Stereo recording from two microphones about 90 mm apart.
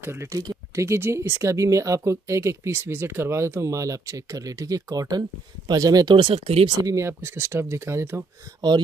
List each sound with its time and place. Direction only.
0.0 s speech: 30° right (ahead or behind); by 6.1 s 45° right (ahead or behind)
6.1 s speech: 85° right
6.8 s speech: 35° right (ahead or behind)
8.5 s speech: 55° right (ahead or behind)